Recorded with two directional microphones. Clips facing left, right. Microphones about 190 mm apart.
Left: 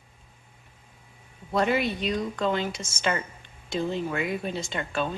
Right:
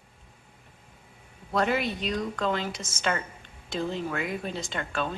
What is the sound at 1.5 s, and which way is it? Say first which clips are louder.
A woman's voice: left 2 dB; centre (ahead or behind).